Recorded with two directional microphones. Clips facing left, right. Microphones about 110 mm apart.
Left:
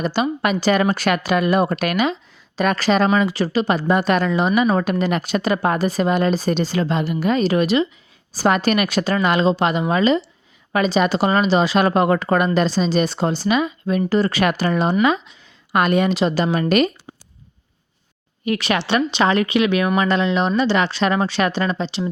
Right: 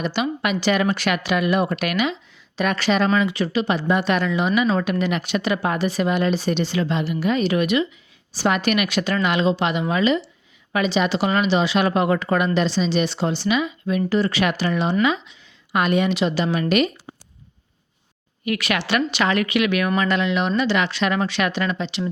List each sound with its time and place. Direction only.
0.0 s a woman's voice: 40° left (ahead or behind)
18.4 s a woman's voice: 30° left (ahead or behind)